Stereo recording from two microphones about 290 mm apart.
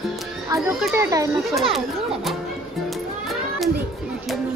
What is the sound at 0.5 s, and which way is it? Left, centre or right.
Speech, centre.